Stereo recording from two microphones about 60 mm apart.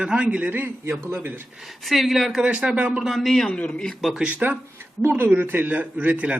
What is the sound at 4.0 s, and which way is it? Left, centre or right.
Speech, centre.